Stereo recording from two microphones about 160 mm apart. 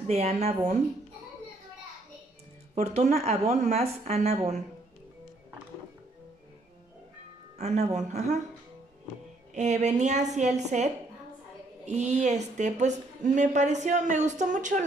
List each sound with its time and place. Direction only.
0.0 s a woman's voice: 40° right (ahead or behind)
2.7 s a woman's voice: 45° right (ahead or behind)
7.5 s a woman's voice: 40° right (ahead or behind)
9.5 s a woman's voice: 45° right (ahead or behind)